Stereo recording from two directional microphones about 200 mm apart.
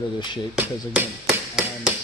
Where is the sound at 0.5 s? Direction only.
5° right (ahead or behind).